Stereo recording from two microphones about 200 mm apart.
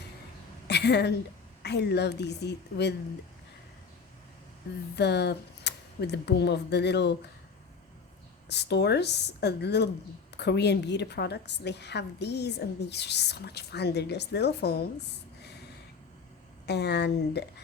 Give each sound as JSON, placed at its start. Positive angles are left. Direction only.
{"t": 0.7, "sound": "a woman's voice", "side_deg": 55}
{"t": 4.9, "sound": "speech", "side_deg": 55}
{"t": 8.4, "sound": "a woman's voice", "side_deg": 55}
{"t": 15.4, "sound": "snort", "side_deg": 55}
{"t": 16.6, "sound": "a woman's voice", "side_deg": 55}